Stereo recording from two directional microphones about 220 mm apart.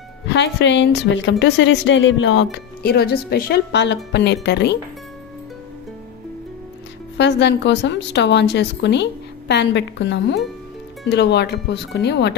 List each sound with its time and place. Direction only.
0.3 s speech: 50° left (ahead or behind)
7.2 s speech: 50° left (ahead or behind)